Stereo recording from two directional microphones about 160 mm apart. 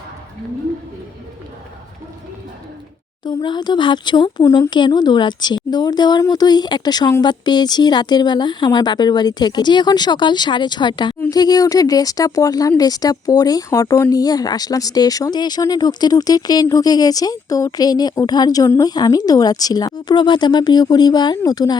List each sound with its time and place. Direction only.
3.2 s speech: 25° left (ahead or behind)